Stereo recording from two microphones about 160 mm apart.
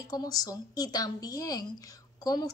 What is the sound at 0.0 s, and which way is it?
Speech, 25° left (ahead or behind).